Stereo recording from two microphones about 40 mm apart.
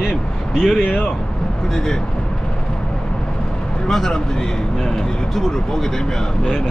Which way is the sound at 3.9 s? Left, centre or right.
Centre.